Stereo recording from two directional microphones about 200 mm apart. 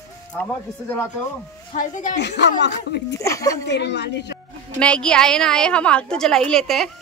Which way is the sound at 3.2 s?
15° left (ahead or behind).